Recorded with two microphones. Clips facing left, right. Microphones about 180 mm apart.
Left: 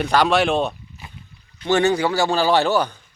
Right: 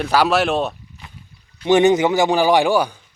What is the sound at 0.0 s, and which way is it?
Speech, 5° right (ahead or behind).